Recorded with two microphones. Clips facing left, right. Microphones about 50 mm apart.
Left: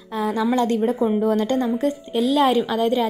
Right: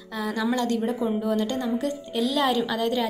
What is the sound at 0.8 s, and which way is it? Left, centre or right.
Speech, left.